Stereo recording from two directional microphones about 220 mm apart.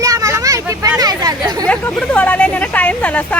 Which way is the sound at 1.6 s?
5° left (ahead or behind).